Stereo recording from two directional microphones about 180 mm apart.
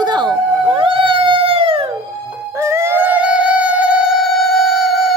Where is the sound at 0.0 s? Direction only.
25° right (ahead or behind).